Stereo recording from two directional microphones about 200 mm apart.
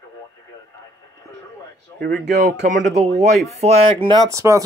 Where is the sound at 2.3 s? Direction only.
35° right (ahead or behind).